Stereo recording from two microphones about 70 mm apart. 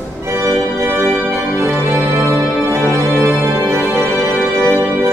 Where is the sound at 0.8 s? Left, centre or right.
Right.